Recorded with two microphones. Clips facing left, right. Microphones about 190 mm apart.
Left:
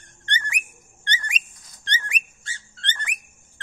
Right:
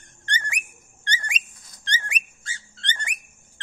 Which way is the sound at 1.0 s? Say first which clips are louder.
Even; 35° right (ahead or behind).